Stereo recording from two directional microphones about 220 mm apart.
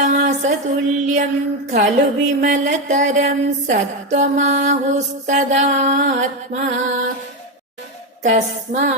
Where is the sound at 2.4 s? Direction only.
35° right (ahead or behind).